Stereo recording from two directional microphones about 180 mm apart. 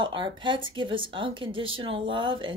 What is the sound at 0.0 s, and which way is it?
A woman's voice, 25° right (ahead or behind).